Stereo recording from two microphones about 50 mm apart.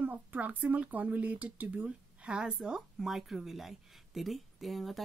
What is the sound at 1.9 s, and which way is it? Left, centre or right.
Speech, right.